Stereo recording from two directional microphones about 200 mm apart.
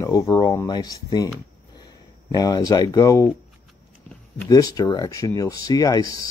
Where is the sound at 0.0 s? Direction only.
15° left (ahead or behind).